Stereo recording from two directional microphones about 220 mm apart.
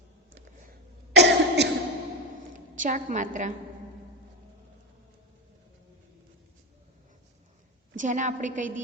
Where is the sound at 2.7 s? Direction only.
35° right (ahead or behind).